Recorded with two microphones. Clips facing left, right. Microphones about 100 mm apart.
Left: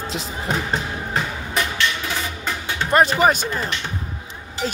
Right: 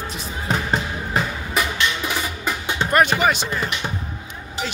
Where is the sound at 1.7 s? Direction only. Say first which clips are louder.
Right 1 dB; 15° right (ahead or behind).